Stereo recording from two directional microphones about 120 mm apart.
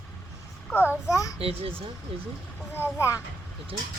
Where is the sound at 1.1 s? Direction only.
30° left (ahead or behind).